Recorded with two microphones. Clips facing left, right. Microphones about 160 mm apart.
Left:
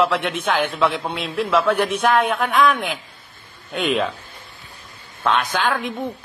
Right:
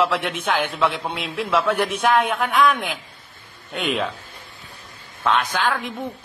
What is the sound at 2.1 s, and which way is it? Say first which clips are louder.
Speech: even; 10° right (ahead or behind).